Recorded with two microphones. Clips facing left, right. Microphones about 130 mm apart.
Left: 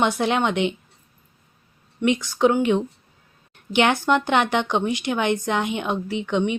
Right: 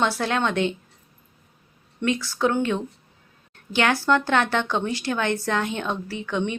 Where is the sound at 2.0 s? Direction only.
20° left (ahead or behind).